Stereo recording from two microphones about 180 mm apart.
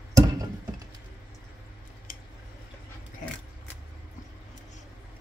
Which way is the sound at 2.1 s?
50° left (ahead or behind).